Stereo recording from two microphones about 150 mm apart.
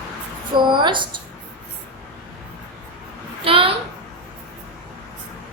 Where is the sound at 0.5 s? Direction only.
30° right (ahead or behind).